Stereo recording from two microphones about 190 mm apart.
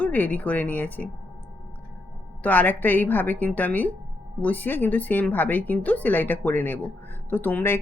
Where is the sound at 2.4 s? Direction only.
10° left (ahead or behind).